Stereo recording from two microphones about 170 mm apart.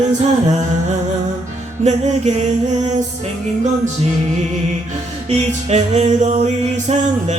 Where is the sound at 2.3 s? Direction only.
45° right (ahead or behind).